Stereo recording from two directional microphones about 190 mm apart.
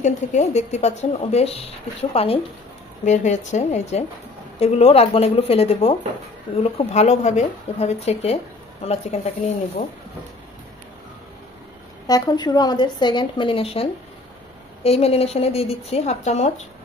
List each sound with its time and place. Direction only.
0.0 s a woman's voice: 35° left (ahead or behind)
12.1 s a woman's voice: 20° left (ahead or behind)